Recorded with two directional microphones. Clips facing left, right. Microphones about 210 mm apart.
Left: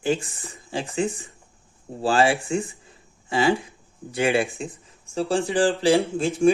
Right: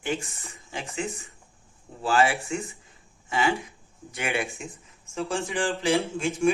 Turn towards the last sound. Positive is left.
turn(degrees=35)  # may be behind; listen again after turning